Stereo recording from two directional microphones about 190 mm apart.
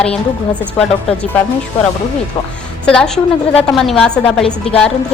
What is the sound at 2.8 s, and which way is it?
A woman's voice, 5° left (ahead or behind).